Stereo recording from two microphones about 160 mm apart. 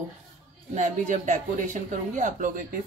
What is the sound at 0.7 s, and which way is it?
A woman's voice, 50° right (ahead or behind).